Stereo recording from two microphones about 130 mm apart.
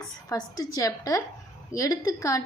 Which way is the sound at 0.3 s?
30° left (ahead or behind).